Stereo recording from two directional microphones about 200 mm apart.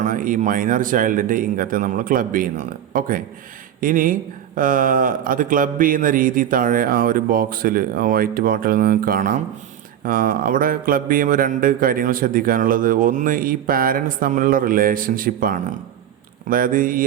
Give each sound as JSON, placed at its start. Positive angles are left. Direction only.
{"t": 0.0, "sound": "speech", "side_deg": -40}